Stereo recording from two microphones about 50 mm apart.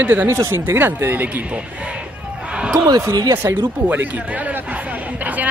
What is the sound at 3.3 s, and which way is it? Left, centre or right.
Speech, right.